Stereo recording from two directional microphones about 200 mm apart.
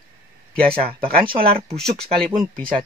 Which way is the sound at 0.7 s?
30° right (ahead or behind).